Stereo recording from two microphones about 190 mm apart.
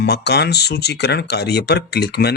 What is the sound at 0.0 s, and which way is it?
Speech, 60° left (ahead or behind).